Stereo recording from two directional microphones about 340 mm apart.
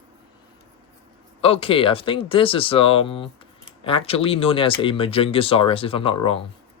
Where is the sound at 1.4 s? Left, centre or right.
Centre.